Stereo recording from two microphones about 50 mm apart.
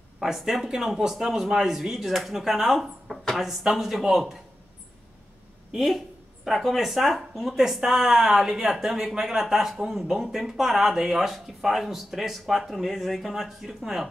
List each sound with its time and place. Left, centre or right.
0.2 s a man's voice: centre
5.7 s speech: centre